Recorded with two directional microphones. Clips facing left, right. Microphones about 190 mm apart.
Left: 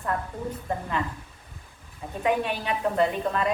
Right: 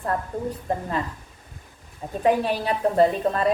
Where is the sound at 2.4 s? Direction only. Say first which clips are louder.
Right 4 dB; 35° right (ahead or behind).